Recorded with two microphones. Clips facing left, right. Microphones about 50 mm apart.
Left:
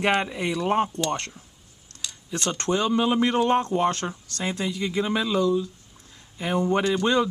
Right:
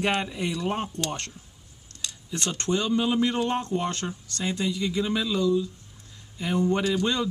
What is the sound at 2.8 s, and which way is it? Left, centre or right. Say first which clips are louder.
Speech: left 3 dB; left.